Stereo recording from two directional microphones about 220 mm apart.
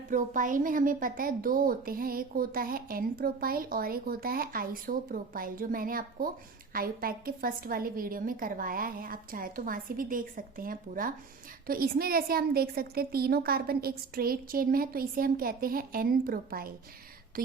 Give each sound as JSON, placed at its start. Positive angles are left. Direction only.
{"t": 0.1, "sound": "a woman's voice", "side_deg": -35}